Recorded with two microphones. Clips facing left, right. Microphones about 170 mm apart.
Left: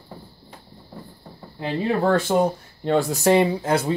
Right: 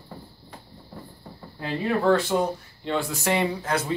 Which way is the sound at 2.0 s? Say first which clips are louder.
Left 2 dB; 50° left (ahead or behind).